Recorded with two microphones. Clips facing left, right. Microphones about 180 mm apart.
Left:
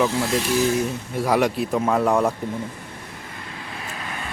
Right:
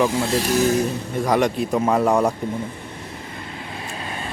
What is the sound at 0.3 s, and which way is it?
Speech, 40° right (ahead or behind).